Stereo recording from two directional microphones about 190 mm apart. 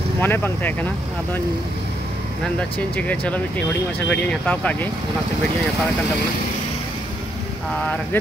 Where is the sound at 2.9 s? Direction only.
10° left (ahead or behind).